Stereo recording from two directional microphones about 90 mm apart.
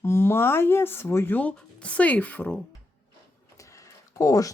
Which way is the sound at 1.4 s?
15° left (ahead or behind).